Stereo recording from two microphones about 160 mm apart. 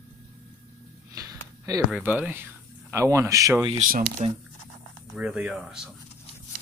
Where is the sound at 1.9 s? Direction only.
5° right (ahead or behind).